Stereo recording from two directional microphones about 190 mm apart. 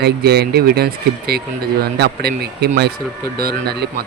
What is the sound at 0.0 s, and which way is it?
Speech, 55° right (ahead or behind).